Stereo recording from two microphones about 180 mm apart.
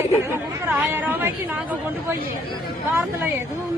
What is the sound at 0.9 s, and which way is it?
Speech, 10° right (ahead or behind).